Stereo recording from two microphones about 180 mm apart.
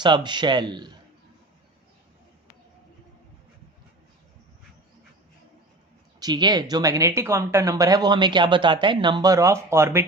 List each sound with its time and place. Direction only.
0.0 s speech: 25° right (ahead or behind)
6.1 s speech: 25° right (ahead or behind)